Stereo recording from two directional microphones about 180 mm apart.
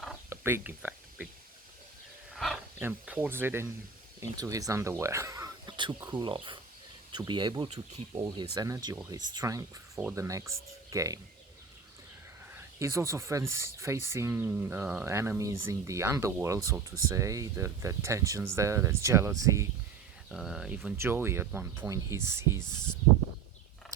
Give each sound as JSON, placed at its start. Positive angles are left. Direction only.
{"t": 0.3, "sound": "speech", "side_deg": -15}
{"t": 2.3, "sound": "wild animals", "side_deg": 0}
{"t": 2.8, "sound": "speech", "side_deg": -10}
{"t": 10.0, "sound": "speech", "side_deg": -5}
{"t": 10.9, "sound": "speech", "side_deg": -20}
{"t": 12.8, "sound": "speech", "side_deg": -15}
{"t": 20.3, "sound": "speech", "side_deg": 0}